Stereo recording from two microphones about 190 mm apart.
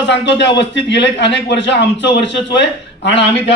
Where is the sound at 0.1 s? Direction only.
70° left (ahead or behind).